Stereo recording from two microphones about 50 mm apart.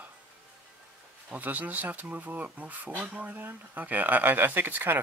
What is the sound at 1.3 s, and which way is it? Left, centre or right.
Speech, right.